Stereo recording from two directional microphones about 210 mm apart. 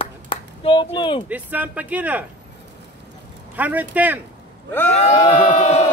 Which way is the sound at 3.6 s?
5° right (ahead or behind).